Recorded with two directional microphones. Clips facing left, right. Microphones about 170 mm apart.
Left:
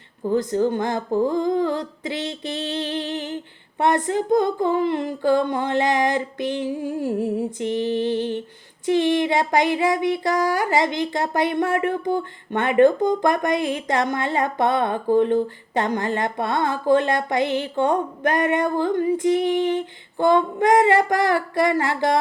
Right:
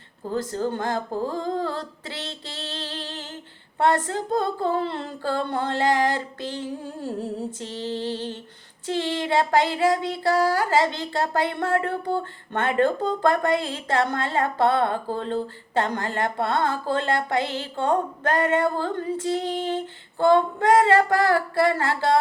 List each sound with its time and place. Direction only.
0.3 s child singing: 20° left (ahead or behind)